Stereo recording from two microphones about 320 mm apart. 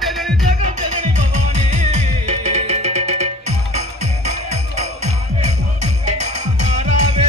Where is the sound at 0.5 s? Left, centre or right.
Right.